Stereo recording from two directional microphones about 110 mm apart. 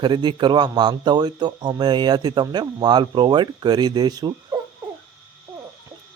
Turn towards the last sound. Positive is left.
turn(degrees=-40)  # may be behind; listen again after turning